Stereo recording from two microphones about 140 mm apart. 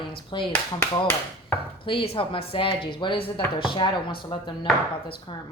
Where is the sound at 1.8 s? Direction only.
40° left (ahead or behind).